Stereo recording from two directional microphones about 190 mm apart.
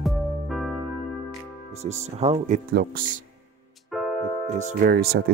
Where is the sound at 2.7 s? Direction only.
50° right (ahead or behind).